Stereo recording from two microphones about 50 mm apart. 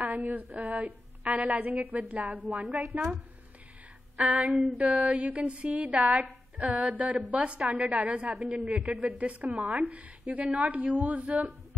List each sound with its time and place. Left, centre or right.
0.0 s a woman's voice: right
4.2 s a woman's voice: right
8.5 s a man's voice: centre
8.7 s a woman's voice: right